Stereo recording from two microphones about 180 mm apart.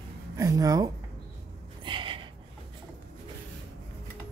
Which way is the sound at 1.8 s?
25° right (ahead or behind).